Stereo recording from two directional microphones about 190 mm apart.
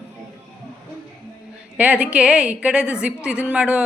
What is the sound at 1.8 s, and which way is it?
A woman's voice, 5° right (ahead or behind).